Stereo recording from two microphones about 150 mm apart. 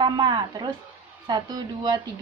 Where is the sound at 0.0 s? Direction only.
25° right (ahead or behind).